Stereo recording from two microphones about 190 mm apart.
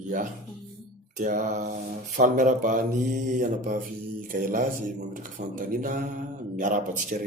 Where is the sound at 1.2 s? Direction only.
40° right (ahead or behind).